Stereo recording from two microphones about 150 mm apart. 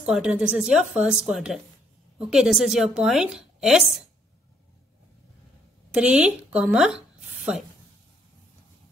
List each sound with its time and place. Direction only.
0.0 s a woman's voice: 5° right (ahead or behind)
5.9 s a woman's voice: 5° right (ahead or behind)